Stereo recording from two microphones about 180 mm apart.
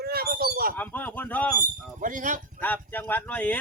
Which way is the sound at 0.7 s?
10° left (ahead or behind).